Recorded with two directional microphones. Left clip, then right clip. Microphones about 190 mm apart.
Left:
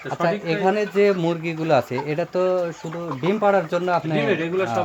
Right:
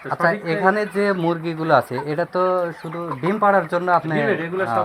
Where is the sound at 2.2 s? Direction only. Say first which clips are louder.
Right 2 dB; 10° left (ahead or behind).